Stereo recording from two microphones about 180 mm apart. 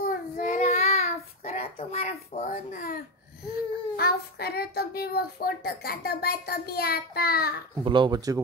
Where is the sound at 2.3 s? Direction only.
45° left (ahead or behind).